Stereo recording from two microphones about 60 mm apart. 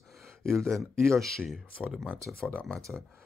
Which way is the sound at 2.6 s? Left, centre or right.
Centre.